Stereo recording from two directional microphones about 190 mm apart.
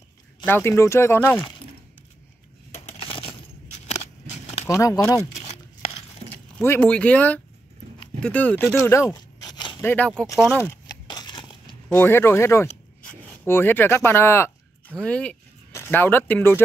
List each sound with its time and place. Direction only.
0.5 s speech: 10° left (ahead or behind)
2.7 s coin: 30° left (ahead or behind)
4.6 s speech: 15° left (ahead or behind)
6.6 s speech: 10° left (ahead or behind)
9.1 s a sound: 20° left (ahead or behind)
9.8 s speech: 5° left (ahead or behind)
11.1 s a sound: 20° left (ahead or behind)
11.9 s speech: 10° left (ahead or behind)